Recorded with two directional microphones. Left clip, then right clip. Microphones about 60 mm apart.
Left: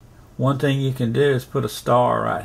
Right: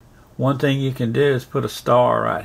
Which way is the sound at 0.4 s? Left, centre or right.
Right.